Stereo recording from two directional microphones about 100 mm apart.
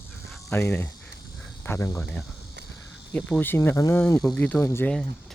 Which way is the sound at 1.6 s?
30° left (ahead or behind).